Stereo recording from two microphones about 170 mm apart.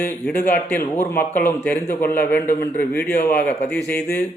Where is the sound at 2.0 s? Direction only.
60° left (ahead or behind).